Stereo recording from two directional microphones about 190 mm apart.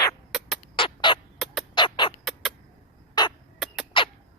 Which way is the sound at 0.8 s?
25° left (ahead or behind).